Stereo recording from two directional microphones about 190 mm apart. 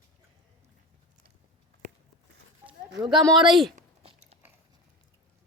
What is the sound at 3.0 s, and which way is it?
Speech, 25° right (ahead or behind).